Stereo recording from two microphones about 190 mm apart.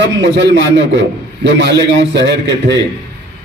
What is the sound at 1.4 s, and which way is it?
A man's voice, 65° right (ahead or behind).